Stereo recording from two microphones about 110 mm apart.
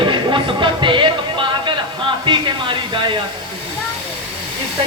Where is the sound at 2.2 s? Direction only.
45° right (ahead or behind).